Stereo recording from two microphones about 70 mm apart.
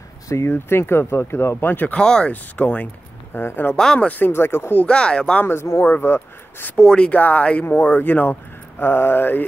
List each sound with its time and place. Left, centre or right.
0.3 s speech: left
2.0 s speech: centre; by 3.7 s left
3.7 s speech: centre
4.1 s speech: left
4.7 s speech: centre
5.4 s speech: left
6.8 s speech: centre; by 9.4 s left